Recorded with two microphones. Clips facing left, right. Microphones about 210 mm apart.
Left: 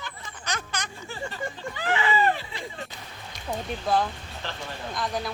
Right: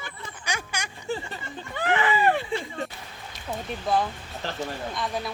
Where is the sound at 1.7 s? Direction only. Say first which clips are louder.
Right 3 dB; 55° right (ahead or behind).